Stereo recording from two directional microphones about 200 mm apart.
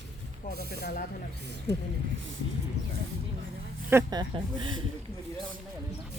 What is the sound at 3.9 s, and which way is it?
Speech, 15° right (ahead or behind).